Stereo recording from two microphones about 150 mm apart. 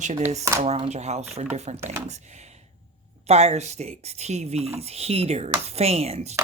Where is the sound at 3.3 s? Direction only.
45° right (ahead or behind).